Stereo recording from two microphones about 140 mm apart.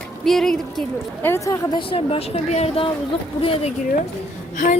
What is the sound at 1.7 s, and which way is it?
A woman's voice, 40° left (ahead or behind).